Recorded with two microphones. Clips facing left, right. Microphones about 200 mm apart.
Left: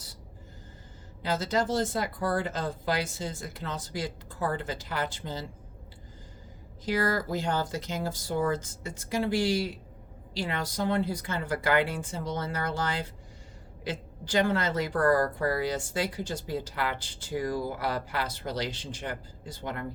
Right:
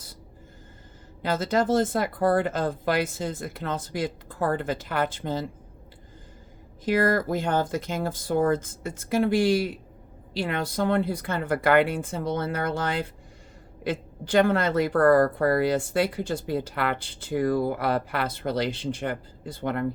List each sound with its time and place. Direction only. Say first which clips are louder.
1.2 s speech: right 4 dB; 55° right (ahead or behind)
6.8 s speech: right 5 dB; 55° right (ahead or behind)